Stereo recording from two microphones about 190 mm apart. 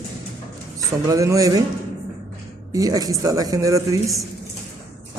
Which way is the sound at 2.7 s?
20° right (ahead or behind).